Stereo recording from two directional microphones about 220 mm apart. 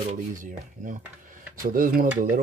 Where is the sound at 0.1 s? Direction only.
35° right (ahead or behind).